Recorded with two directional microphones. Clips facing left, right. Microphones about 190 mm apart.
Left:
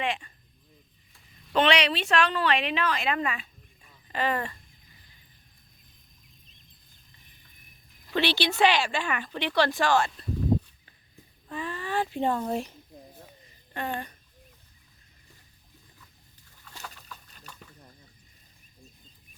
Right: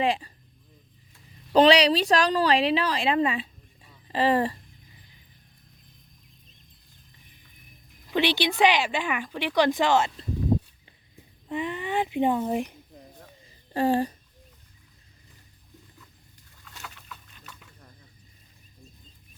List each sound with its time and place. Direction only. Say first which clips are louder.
0.0 s speech: right 6 dB; 35° right (ahead or behind)
1.5 s a woman's voice: right 6 dB; 35° right (ahead or behind)
8.1 s speech: right 2 dB; 15° right (ahead or behind)
11.4 s speech: right 4 dB; 20° right (ahead or behind)
13.4 s a sound: right 10 dB; 30° right (ahead or behind)